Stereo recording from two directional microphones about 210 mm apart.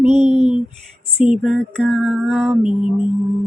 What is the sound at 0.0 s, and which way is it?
Speech, 30° right (ahead or behind).